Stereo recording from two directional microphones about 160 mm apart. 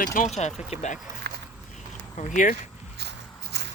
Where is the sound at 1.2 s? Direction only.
90° right.